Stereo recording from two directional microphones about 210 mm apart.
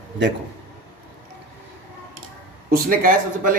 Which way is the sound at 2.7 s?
40° right (ahead or behind).